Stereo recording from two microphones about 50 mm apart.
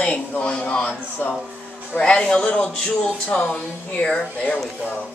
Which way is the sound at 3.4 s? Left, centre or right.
Left.